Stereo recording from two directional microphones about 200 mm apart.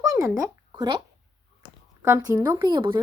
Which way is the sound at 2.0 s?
15° right (ahead or behind).